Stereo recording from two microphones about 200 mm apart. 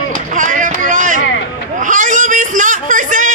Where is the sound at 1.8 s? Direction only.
40° right (ahead or behind).